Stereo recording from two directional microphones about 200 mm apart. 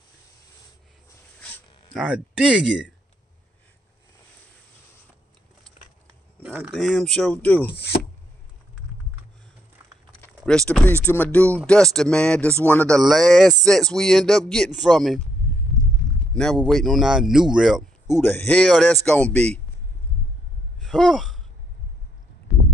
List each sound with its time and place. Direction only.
2.0 s speech: 5° right (ahead or behind)
6.4 s speech: 5° right (ahead or behind)
7.7 s chopping: 55° left (ahead or behind)
10.2 s vehicle: 5° left (ahead or behind)
11.1 s speech: 10° left (ahead or behind)
16.6 s speech: centre (ahead or behind)
20.8 s sigh: centre (ahead or behind)